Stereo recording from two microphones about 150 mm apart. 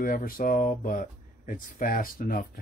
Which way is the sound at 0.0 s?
70° left (ahead or behind).